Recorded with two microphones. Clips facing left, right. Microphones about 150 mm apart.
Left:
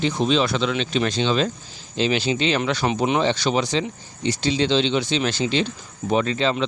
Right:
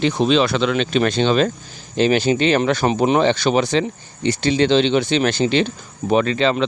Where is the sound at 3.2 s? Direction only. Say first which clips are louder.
Right 4 dB; 55° right (ahead or behind).